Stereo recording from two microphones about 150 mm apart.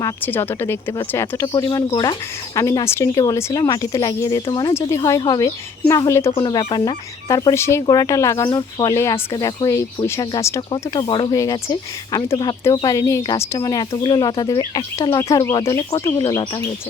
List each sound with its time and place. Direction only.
0.0 s speech: 15° left (ahead or behind)
2.6 s speech: 20° left (ahead or behind)